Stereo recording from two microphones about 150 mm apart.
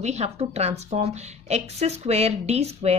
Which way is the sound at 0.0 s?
45° right (ahead or behind).